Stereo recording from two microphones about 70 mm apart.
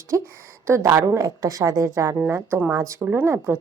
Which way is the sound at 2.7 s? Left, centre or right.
Right.